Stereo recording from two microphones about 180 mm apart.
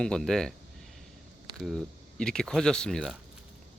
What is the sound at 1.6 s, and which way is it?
Speech, centre (ahead or behind).